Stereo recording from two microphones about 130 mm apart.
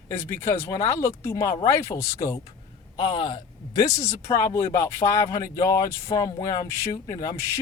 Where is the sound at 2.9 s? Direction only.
40° left (ahead or behind).